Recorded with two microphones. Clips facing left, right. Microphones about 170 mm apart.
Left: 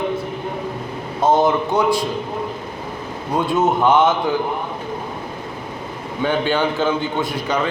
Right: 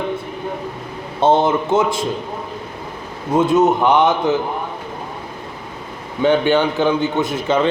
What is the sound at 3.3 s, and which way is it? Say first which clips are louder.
A man's voice: right 4 dB; 20° right (ahead or behind).